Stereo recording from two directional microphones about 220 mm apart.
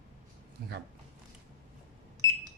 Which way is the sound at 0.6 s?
45° right (ahead or behind).